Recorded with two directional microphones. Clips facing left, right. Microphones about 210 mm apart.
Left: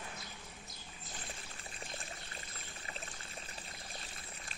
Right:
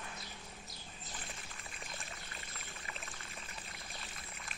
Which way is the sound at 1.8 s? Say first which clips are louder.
Left 3 dB; 30° left (ahead or behind).